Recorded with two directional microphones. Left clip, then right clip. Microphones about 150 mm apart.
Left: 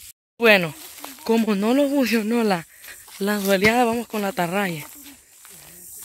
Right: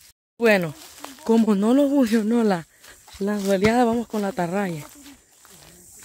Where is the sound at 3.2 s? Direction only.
Centre (ahead or behind).